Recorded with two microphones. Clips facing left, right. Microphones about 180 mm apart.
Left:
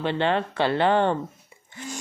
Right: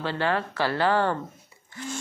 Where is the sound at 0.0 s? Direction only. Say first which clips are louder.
Left 3 dB; 20° left (ahead or behind).